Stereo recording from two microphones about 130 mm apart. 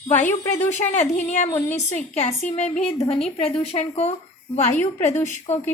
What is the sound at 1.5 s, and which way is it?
Speech, 15° left (ahead or behind).